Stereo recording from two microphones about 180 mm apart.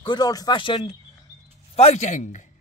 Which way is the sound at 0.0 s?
25° left (ahead or behind).